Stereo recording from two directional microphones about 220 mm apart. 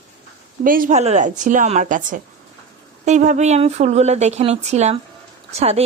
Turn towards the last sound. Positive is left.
turn(degrees=-30)  # may be behind; listen again after turning